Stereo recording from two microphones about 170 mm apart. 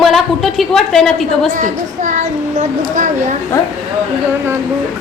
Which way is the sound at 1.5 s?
45° right (ahead or behind).